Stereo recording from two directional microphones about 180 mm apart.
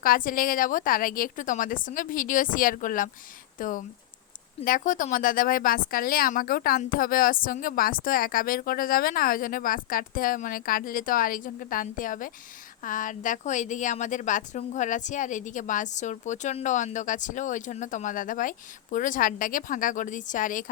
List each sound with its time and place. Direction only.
0.0 s a woman's voice: 50° left (ahead or behind)